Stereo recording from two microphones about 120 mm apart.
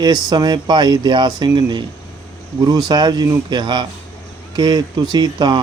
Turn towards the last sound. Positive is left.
turn(degrees=-35)  # may be behind; listen again after turning